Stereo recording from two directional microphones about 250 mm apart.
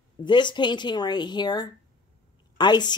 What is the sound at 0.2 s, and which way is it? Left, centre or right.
A woman's voice, centre.